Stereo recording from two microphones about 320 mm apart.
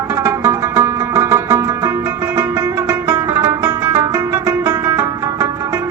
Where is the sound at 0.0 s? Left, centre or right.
Centre.